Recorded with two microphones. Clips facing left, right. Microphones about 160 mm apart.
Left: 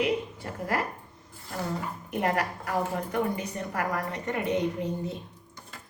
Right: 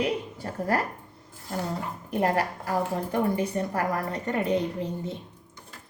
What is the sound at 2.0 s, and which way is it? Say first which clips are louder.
A woman's voice: right 3 dB; 30° right (ahead or behind).